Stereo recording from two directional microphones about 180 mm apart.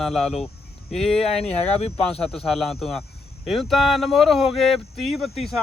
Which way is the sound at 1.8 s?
35° left (ahead or behind).